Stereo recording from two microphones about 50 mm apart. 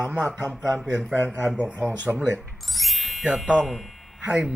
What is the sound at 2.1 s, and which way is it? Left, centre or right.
Speech, centre.